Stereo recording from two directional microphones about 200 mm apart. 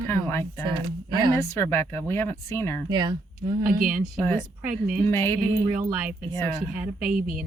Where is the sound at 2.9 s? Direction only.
20° right (ahead or behind).